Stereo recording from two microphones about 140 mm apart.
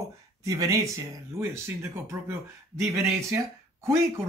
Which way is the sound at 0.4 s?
25° right (ahead or behind).